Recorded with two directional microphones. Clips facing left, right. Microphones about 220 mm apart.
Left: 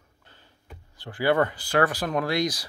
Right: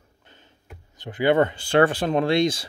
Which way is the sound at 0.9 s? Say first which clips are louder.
Right 3 dB; 20° right (ahead or behind).